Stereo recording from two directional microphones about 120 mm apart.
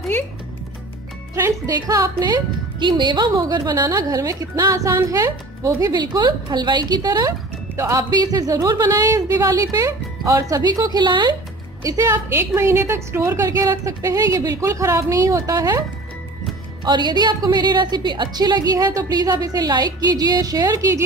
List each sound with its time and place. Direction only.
1.3 s a woman's voice: 25° right (ahead or behind)
11.8 s a woman's voice: 30° right (ahead or behind)
16.8 s a woman's voice: 40° right (ahead or behind)